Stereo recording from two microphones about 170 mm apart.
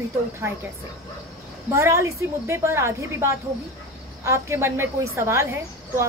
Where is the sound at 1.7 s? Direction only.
15° right (ahead or behind).